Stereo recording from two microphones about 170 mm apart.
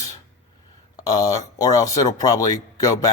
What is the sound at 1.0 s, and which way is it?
Speech, 20° left (ahead or behind).